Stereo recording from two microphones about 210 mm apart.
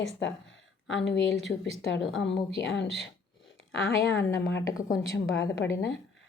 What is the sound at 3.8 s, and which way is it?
Speech, 15° left (ahead or behind).